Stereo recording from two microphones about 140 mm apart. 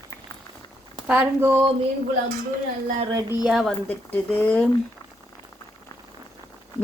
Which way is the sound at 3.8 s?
15° left (ahead or behind).